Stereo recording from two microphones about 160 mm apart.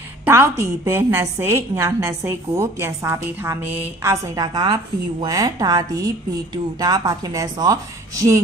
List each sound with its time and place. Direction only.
0.2 s a woman's voice: 15° right (ahead or behind)